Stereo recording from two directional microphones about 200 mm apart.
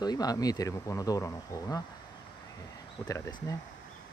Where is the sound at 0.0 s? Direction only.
20° left (ahead or behind).